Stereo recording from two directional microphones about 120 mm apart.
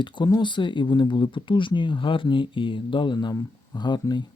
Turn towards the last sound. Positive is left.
turn(degrees=40)  # may be behind; listen again after turning